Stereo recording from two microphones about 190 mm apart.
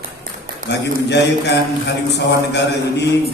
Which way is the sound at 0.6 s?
65° left (ahead or behind).